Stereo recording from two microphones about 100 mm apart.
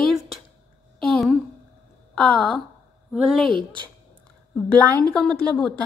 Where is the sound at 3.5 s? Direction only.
50° right (ahead or behind).